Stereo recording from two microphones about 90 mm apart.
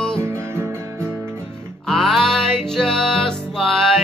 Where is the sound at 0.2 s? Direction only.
25° right (ahead or behind).